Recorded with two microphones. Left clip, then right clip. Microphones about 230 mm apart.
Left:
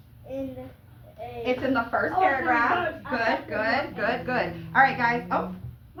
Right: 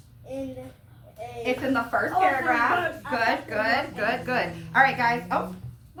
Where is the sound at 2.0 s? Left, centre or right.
Right.